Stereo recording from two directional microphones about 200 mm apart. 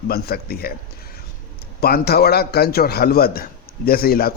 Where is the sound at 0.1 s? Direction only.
50° left (ahead or behind).